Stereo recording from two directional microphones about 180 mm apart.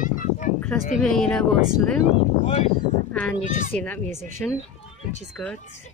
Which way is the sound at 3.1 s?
10° left (ahead or behind).